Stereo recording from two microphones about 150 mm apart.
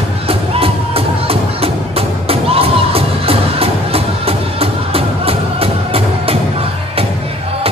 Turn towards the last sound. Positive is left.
turn(degrees=-40)  # may be behind; listen again after turning